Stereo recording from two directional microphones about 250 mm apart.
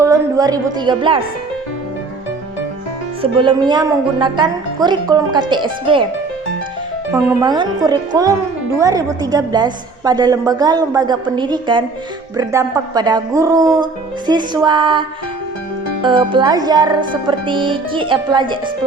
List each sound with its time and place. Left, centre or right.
0.0 s a woman's voice: centre
3.2 s a woman's voice: centre
7.1 s a woman's voice: centre
16.0 s speech: centre